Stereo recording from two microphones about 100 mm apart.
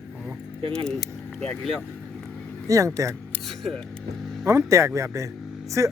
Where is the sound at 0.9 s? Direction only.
5° left (ahead or behind).